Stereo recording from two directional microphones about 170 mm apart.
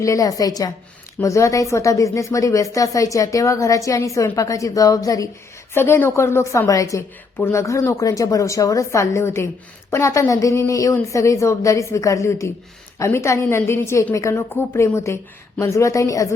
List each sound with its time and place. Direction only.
0.0 s a woman's voice: 20° left (ahead or behind)